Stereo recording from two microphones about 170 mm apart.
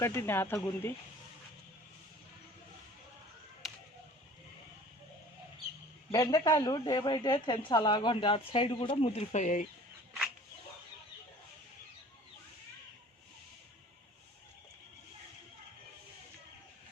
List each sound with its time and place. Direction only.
0.0 s speech: 15° left (ahead or behind)
6.1 s speech: 20° left (ahead or behind); by 9.6 s 50° left (ahead or behind)